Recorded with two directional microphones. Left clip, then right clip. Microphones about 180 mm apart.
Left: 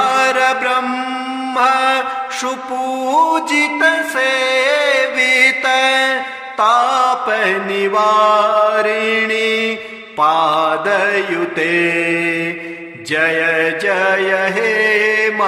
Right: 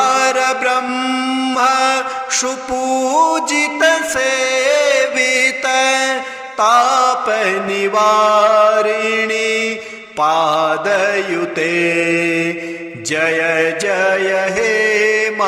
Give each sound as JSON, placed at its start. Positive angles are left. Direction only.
{"t": 0.0, "sound": "mantra", "side_deg": -25}
{"t": 2.9, "sound": "music", "side_deg": -25}
{"t": 6.6, "sound": "mantra", "side_deg": -30}